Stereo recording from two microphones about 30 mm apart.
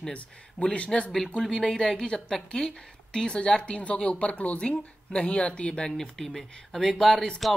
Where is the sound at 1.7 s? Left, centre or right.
Centre.